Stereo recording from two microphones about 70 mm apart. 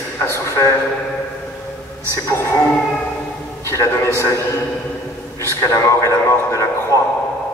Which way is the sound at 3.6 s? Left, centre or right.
Left.